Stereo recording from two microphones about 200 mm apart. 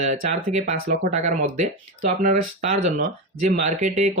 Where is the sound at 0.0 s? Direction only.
35° right (ahead or behind).